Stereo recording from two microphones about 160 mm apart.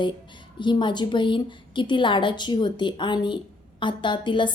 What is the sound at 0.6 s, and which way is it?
A woman's voice, 30° left (ahead or behind).